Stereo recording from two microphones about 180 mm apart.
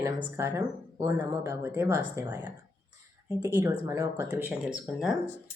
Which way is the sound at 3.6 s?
15° right (ahead or behind).